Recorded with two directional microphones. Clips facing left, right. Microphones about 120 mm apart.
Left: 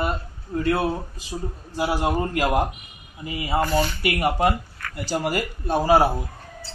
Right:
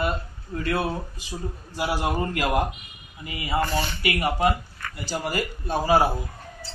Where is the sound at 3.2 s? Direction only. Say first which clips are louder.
Left 3 dB; 30° left (ahead or behind).